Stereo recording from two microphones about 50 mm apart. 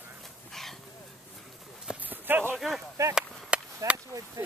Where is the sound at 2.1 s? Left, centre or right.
Right.